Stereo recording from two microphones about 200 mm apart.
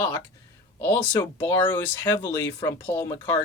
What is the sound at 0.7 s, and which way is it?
Speech, 10° left (ahead or behind).